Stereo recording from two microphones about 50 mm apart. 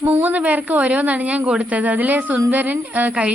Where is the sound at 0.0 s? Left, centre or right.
Right.